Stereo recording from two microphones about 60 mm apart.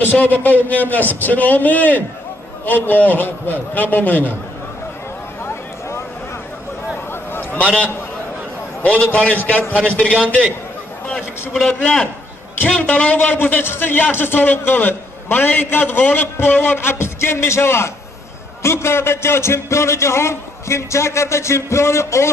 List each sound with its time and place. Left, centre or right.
0.0 s a man's voice: left
5.4 s a sound: left
7.1 s a sound: left
7.6 s a man's voice: centre
8.8 s a man's voice: left
11.6 s a man's voice: centre
12.5 s a man's voice: left